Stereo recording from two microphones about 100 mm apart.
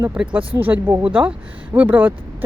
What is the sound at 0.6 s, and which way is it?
Speech, 20° right (ahead or behind).